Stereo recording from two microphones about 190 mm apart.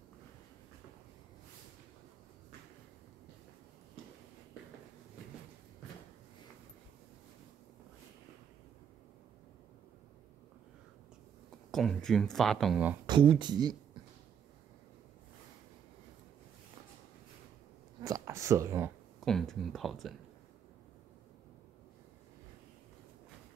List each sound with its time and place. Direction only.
11.7 s speech: centre (ahead or behind)
13.0 s speech: 25° right (ahead or behind)
18.0 s a sound: 15° right (ahead or behind)
19.2 s speech: centre (ahead or behind)